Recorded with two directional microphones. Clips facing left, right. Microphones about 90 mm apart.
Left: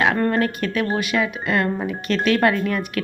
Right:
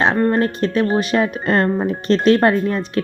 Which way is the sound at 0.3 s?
30° right (ahead or behind).